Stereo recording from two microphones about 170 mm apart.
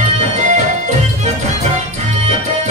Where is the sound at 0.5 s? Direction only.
45° right (ahead or behind).